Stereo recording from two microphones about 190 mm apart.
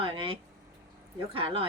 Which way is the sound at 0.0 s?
25° right (ahead or behind).